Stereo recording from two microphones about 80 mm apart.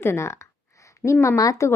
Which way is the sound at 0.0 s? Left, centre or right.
Left.